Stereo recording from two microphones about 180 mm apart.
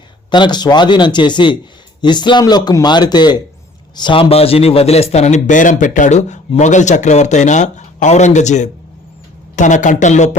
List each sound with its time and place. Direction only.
0.3 s a man's voice: 25° left (ahead or behind); by 10.3 s 40° left (ahead or behind)